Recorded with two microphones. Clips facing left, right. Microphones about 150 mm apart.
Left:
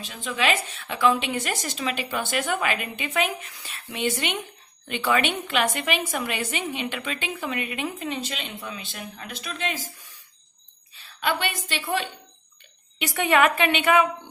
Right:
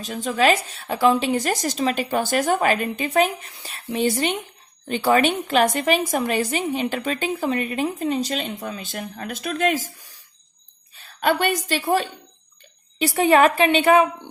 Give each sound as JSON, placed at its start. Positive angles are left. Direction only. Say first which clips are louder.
{"t": 0.0, "sound": "a woman's voice", "louder": "right 7 dB", "side_deg": -40}